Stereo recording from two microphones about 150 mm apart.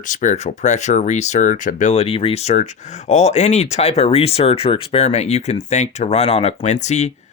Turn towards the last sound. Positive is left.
turn(degrees=50)  # may be behind; listen again after turning